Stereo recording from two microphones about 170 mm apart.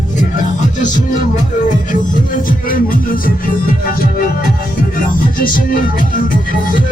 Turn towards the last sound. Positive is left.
turn(degrees=55)  # may be behind; listen again after turning